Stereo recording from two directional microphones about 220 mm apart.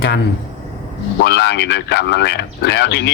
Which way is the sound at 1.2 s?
50° left (ahead or behind).